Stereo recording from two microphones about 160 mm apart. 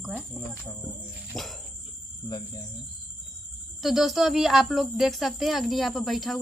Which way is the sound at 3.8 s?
Centre (ahead or behind).